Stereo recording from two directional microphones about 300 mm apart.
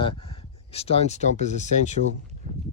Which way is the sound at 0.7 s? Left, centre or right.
Centre.